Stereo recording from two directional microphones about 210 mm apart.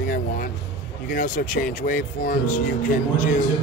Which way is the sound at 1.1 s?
40° left (ahead or behind).